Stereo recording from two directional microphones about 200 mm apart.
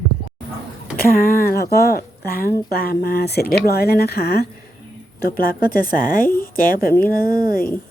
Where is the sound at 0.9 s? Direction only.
45° left (ahead or behind).